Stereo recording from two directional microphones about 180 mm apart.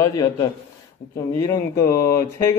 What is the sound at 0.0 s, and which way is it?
A man's voice, 20° left (ahead or behind).